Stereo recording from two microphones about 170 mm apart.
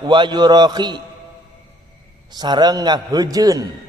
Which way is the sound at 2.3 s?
25° right (ahead or behind).